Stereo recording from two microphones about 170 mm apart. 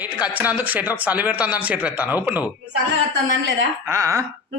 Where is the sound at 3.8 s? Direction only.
20° right (ahead or behind).